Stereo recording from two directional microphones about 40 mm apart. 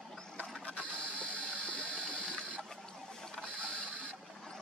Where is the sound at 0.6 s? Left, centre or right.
Left.